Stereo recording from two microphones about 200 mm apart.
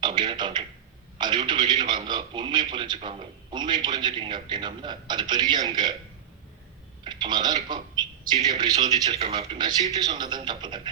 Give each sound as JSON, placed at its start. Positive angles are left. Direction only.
{"t": 0.0, "sound": "a man's voice", "side_deg": -25}
{"t": 7.0, "sound": "speech", "side_deg": -20}
{"t": 9.1, "sound": "a man's voice", "side_deg": -30}